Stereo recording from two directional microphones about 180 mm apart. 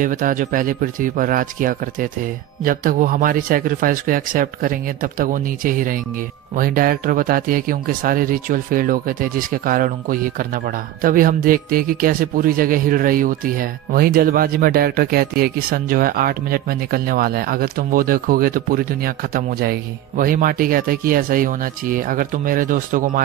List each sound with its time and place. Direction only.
0.0 s speech: 45° right (ahead or behind)